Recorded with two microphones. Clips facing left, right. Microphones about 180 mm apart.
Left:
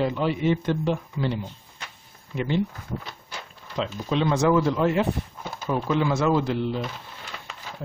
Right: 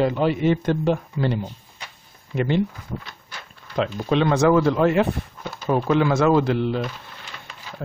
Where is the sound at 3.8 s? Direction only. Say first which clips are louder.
Right 4 dB; 65° right (ahead or behind).